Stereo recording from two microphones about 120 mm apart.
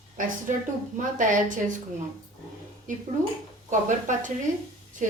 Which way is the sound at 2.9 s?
90° right.